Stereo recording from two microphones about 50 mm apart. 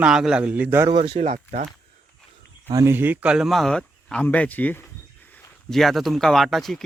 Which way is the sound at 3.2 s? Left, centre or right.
Right.